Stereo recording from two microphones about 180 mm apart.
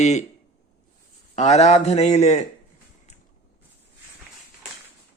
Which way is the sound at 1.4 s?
40° left (ahead or behind).